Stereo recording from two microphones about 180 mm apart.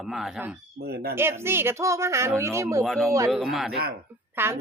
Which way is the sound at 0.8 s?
60° right (ahead or behind).